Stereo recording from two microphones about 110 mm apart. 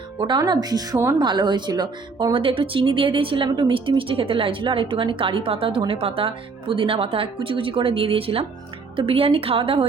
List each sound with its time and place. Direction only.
0.2 s a woman's voice: 40° right (ahead or behind)